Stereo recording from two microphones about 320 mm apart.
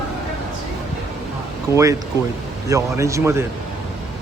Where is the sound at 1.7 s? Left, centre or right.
Centre.